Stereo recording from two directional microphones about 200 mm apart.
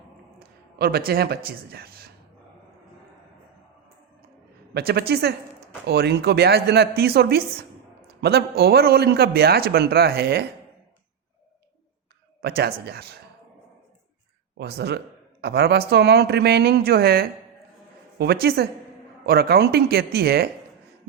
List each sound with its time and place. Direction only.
0.3 s a sound: 50° right (ahead or behind)
1.5 s speech: 50° right (ahead or behind)
4.7 s speech: 50° right (ahead or behind)
12.4 s speech: 55° right (ahead or behind)
14.6 s speech: 55° right (ahead or behind)